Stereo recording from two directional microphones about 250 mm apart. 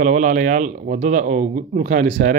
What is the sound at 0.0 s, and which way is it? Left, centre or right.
Speech, right.